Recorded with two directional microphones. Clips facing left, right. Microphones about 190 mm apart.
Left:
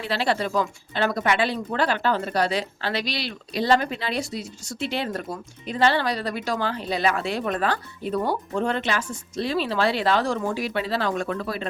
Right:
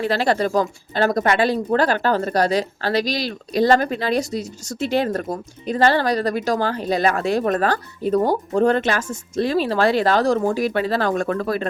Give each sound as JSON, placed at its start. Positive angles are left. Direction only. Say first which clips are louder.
{"t": 0.0, "sound": "speech", "louder": "right 5 dB", "side_deg": -45}